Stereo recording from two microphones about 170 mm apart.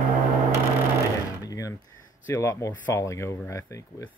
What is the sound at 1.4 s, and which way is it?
Speech, 20° left (ahead or behind).